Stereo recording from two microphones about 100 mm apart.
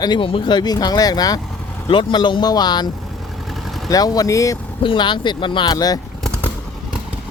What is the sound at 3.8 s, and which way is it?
Speech, 40° left (ahead or behind).